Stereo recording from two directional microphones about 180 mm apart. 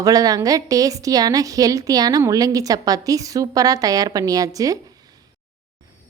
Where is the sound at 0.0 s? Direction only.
20° right (ahead or behind).